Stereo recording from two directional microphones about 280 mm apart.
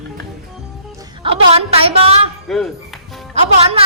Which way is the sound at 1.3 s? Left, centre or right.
Centre.